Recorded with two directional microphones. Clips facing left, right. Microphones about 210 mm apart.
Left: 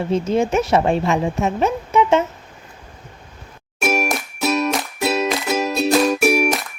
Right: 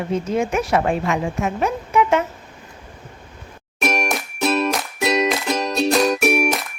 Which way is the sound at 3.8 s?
5° left (ahead or behind).